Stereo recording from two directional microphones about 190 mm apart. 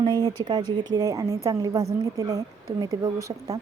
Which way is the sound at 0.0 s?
20° right (ahead or behind).